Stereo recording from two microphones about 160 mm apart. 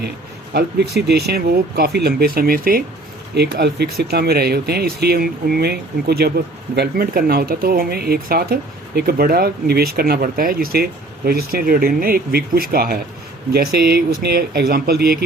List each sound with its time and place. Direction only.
1.0 s speech: 90° right; by 2.8 s 65° right (ahead or behind)
3.3 s speech: 90° right; by 13.0 s 70° right (ahead or behind)
13.5 s speech: 80° right